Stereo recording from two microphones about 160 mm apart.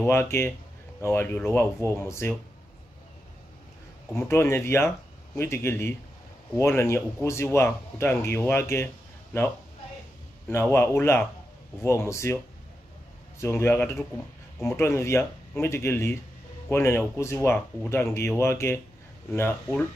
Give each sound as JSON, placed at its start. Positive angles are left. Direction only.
{"t": 0.0, "sound": "speech", "side_deg": 15}
{"t": 4.1, "sound": "speech", "side_deg": 15}
{"t": 10.5, "sound": "speech", "side_deg": 15}
{"t": 13.4, "sound": "speech", "side_deg": 15}